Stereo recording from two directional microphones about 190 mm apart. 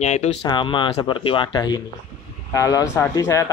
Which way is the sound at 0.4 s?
25° left (ahead or behind).